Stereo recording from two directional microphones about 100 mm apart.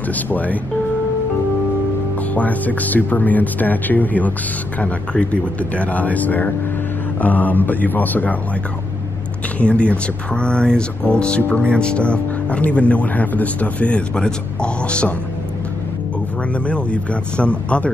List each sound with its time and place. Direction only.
0.1 s speech: 15° left (ahead or behind)
2.3 s speech: 15° left (ahead or behind)
9.6 s speech: 10° left (ahead or behind)
16.5 s speech: 10° left (ahead or behind)